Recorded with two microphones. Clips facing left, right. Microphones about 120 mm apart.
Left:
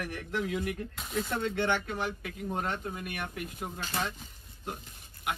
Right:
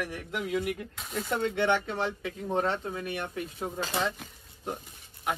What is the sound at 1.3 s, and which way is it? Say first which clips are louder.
Speech: right 4 dB; 25° right (ahead or behind).